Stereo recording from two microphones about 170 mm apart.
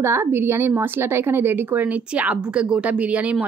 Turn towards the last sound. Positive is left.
turn(degrees=-5)  # may be behind; listen again after turning